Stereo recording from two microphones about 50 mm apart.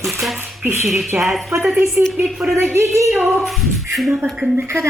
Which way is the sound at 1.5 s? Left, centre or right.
Right.